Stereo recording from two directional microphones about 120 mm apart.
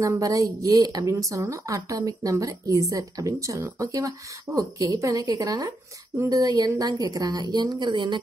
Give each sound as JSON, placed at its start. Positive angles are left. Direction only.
{"t": 0.0, "sound": "a woman's voice", "side_deg": -25}